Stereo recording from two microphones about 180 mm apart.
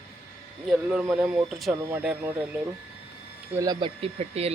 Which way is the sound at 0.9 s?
10° right (ahead or behind).